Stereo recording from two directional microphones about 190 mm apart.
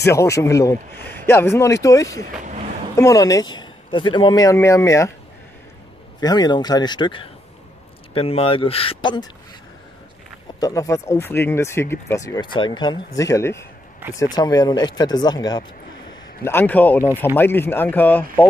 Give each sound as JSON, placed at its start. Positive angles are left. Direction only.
{"t": 0.0, "sound": "speech", "side_deg": 15}
{"t": 6.2, "sound": "speech", "side_deg": 20}
{"t": 10.6, "sound": "speech", "side_deg": 20}
{"t": 16.4, "sound": "speech", "side_deg": 10}